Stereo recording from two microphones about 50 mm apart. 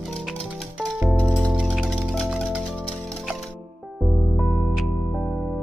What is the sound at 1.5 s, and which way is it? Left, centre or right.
Music, centre.